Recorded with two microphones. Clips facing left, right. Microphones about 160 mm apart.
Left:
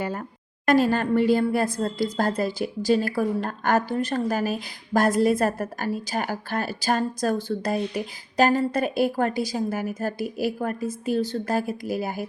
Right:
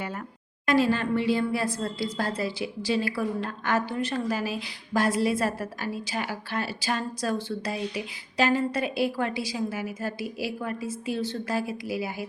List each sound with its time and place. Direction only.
0.6 s a woman's voice: 45° left (ahead or behind)